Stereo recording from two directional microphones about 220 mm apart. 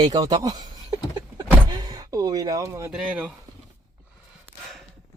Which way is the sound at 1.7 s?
15° right (ahead or behind).